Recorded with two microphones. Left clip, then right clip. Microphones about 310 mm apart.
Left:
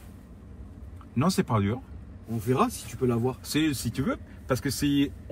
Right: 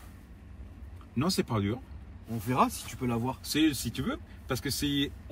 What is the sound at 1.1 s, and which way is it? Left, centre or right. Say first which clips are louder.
Speech: left 4 dB; centre.